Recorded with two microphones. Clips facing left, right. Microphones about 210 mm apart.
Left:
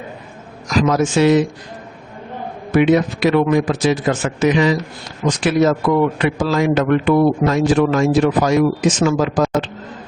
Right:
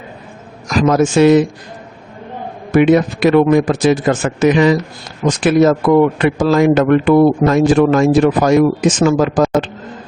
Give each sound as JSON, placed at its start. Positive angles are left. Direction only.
{"t": 0.7, "sound": "speech", "side_deg": -50}
{"t": 2.7, "sound": "speech", "side_deg": -50}